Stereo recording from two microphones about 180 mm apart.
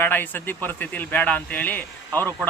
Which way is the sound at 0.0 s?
10° left (ahead or behind).